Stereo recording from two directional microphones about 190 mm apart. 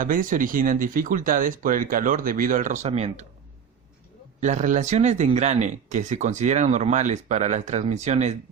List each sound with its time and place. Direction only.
0.0 s speech: 45° right (ahead or behind)
4.4 s speech: 40° right (ahead or behind)